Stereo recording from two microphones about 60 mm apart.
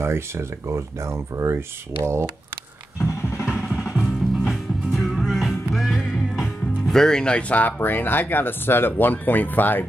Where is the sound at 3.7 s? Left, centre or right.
Centre.